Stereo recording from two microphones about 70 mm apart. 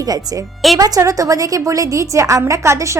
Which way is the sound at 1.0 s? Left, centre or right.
Right.